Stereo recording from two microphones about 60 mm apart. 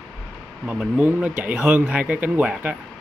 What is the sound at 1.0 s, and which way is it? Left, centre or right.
Speech, right.